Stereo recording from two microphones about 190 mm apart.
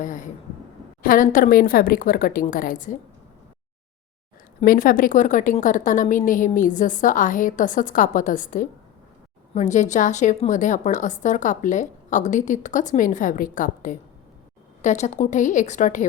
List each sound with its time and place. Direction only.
0.0 s a woman's voice: 40° left (ahead or behind)
4.6 s a woman's voice: 50° left (ahead or behind)